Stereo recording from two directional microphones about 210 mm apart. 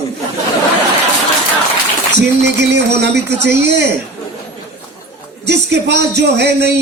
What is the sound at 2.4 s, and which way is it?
Speech, 55° right (ahead or behind).